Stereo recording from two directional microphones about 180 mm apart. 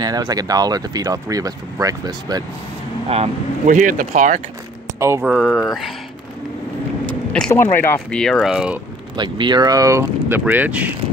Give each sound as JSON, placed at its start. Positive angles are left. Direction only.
{"t": 0.0, "sound": "speech", "side_deg": -20}
{"t": 3.1, "sound": "speech", "side_deg": -35}
{"t": 4.9, "sound": "speech", "side_deg": -15}
{"t": 5.2, "sound": "speech", "side_deg": -5}
{"t": 7.3, "sound": "speech", "side_deg": 5}
{"t": 9.1, "sound": "speech", "side_deg": -25}